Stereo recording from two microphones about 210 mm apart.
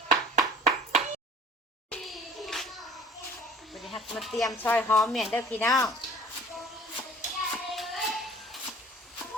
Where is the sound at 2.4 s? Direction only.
Centre (ahead or behind).